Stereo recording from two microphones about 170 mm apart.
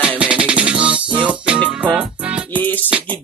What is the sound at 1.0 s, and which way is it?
Music, 30° right (ahead or behind).